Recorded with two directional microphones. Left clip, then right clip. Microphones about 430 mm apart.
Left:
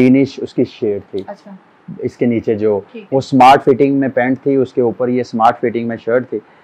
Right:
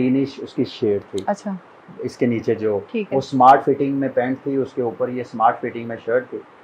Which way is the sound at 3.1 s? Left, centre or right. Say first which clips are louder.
Left 5 dB; left.